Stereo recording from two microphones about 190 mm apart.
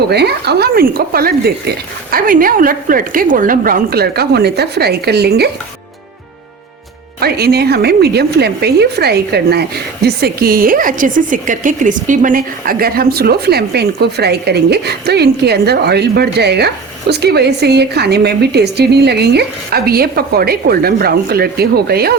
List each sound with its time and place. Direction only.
0.1 s speech: 60° right (ahead or behind)
7.2 s a woman's voice: 55° right (ahead or behind)